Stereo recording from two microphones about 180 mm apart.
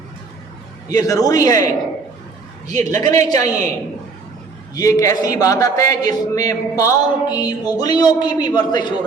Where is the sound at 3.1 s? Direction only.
15° left (ahead or behind).